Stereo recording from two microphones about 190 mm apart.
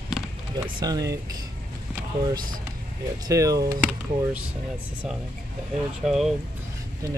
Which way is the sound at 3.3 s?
20° right (ahead or behind).